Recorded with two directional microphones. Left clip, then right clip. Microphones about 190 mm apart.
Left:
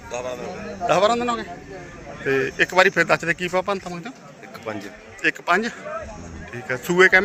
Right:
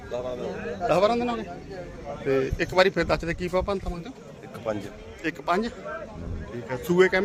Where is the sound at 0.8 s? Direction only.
Centre (ahead or behind).